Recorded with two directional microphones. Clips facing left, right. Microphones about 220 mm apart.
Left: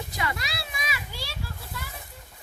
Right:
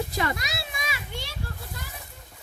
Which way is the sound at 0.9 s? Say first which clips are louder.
Right 1 dB; 25° right (ahead or behind).